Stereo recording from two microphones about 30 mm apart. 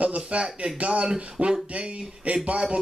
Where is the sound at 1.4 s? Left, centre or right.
Right.